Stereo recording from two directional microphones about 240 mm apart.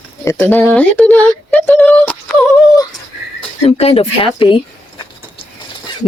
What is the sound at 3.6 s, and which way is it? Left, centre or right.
Speech, left.